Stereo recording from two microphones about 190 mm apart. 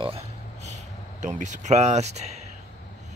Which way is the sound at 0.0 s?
30° right (ahead or behind).